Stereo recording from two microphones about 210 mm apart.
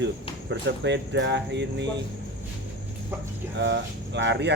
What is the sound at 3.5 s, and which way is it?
Speech, 55° right (ahead or behind).